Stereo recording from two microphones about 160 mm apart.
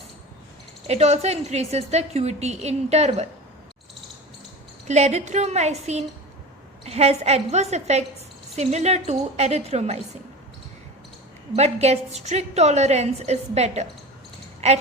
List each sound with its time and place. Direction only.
0.9 s a woman's voice: 45° right (ahead or behind)
4.9 s a woman's voice: 45° right (ahead or behind)
11.5 s a woman's voice: 40° right (ahead or behind)